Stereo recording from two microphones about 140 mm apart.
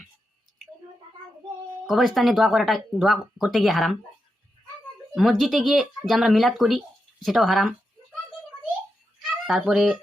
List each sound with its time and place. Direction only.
1.9 s speech: centre (ahead or behind)
5.1 s speech: centre (ahead or behind)
9.5 s speech: 5° right (ahead or behind)